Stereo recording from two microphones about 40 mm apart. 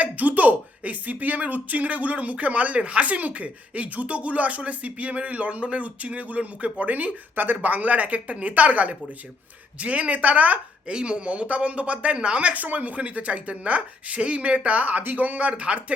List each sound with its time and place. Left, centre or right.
0.0 s speech: right
10.8 s speech: right
12.5 s speech: right